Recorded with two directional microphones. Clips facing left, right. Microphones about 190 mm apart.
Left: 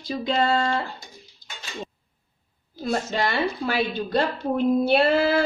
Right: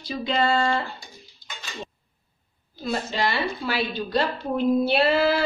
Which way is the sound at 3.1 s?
50° left (ahead or behind).